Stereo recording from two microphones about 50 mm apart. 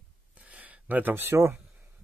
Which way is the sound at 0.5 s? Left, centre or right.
Right.